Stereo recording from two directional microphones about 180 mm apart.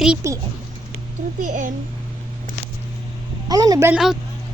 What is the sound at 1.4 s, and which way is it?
Speech, 45° right (ahead or behind).